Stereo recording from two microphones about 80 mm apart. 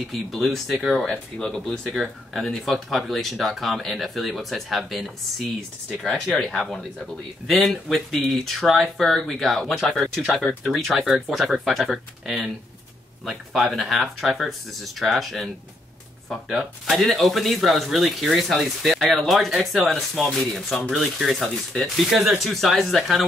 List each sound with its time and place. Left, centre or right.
0.1 s speech: centre